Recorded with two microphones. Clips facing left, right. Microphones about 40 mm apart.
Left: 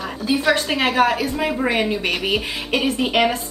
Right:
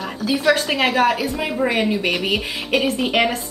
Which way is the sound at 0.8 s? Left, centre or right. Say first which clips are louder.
Even; centre.